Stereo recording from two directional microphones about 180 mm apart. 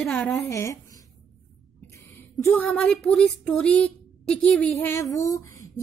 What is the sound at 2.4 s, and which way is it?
A woman's voice, 10° left (ahead or behind).